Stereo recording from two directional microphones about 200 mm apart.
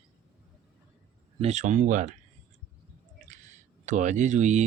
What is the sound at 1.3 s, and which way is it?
Speech, 35° right (ahead or behind).